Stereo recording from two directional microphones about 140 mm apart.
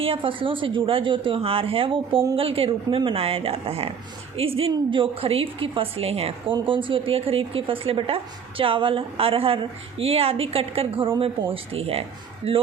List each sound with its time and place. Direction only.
0.0 s a woman's voice: 40° right (ahead or behind)